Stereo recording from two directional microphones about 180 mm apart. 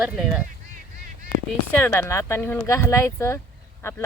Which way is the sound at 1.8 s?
15° left (ahead or behind).